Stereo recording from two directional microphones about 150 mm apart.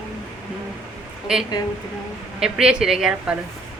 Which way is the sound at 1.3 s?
5° right (ahead or behind).